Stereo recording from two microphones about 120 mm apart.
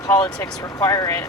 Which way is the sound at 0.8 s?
25° left (ahead or behind).